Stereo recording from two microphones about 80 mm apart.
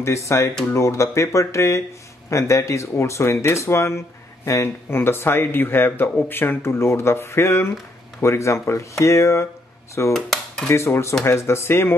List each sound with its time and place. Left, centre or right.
0.0 s speech: left
10.1 s dishes: centre
10.7 s speech: left